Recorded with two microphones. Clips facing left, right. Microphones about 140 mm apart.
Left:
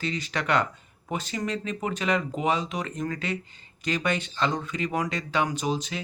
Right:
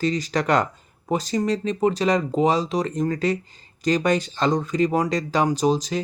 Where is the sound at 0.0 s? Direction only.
40° right (ahead or behind).